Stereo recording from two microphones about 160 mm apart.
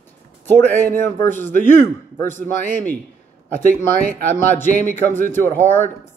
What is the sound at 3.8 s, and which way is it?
Speech, 15° left (ahead or behind).